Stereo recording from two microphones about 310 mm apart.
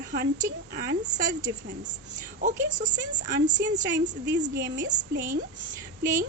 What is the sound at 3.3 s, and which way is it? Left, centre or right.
Speech, right.